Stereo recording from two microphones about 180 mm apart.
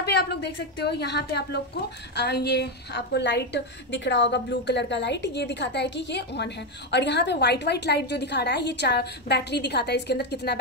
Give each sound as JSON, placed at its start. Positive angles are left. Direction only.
{"t": 0.0, "sound": "a woman's voice", "side_deg": 65}